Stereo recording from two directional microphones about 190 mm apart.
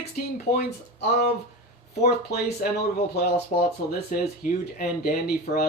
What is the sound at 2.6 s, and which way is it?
Speech, 50° left (ahead or behind).